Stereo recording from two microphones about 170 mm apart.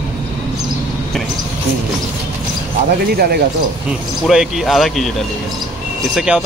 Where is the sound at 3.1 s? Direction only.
65° right (ahead or behind).